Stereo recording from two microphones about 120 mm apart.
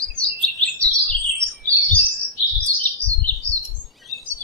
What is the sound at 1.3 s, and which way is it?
Bird, 5° left (ahead or behind).